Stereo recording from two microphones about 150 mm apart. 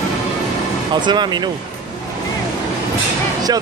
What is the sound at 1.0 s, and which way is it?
Speech, 30° right (ahead or behind).